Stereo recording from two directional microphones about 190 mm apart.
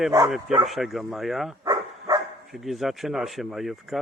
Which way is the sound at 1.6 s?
20° right (ahead or behind).